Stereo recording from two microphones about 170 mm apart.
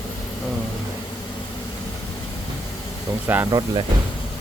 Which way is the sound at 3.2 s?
10° right (ahead or behind).